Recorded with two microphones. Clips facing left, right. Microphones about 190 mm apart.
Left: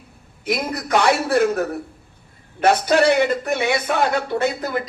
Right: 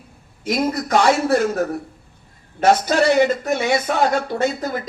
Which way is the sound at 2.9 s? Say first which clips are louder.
Even; 60° left (ahead or behind).